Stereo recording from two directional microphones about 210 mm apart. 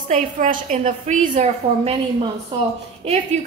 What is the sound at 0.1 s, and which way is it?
A woman's voice, 40° right (ahead or behind).